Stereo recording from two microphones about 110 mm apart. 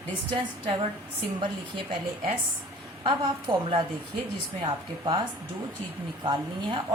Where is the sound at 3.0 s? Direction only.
45° right (ahead or behind).